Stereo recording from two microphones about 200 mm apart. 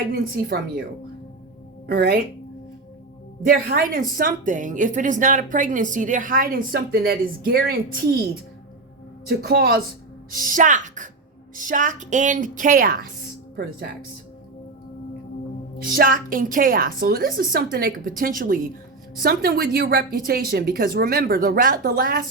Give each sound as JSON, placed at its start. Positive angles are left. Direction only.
{"t": 0.1, "sound": "a woman's voice", "side_deg": -50}
{"t": 1.9, "sound": "a woman's voice", "side_deg": -50}
{"t": 3.4, "sound": "a woman's voice", "side_deg": -50}
{"t": 9.2, "sound": "a woman's voice", "side_deg": -50}
{"t": 13.6, "sound": "speech", "side_deg": -55}
{"t": 16.0, "sound": "a woman's voice", "side_deg": -45}